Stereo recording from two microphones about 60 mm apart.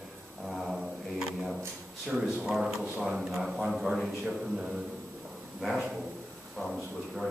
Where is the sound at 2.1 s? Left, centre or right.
Centre.